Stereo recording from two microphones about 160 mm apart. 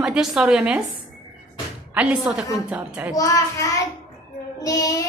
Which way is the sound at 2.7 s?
5° right (ahead or behind).